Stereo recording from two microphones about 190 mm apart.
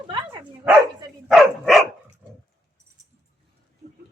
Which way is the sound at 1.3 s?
Centre (ahead or behind).